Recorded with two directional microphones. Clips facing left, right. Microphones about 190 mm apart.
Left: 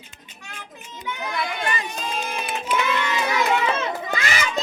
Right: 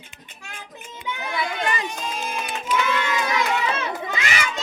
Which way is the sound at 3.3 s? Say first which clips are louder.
Left 2 dB; 35° left (ahead or behind).